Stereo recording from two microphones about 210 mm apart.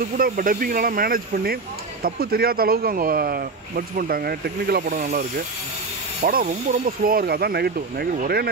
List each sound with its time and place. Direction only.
0.2 s speech: 40° right (ahead or behind)
6.2 s speech: 40° right (ahead or behind)